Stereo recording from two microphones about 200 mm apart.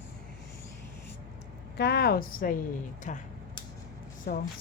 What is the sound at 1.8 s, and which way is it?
Speech, 55° left (ahead or behind).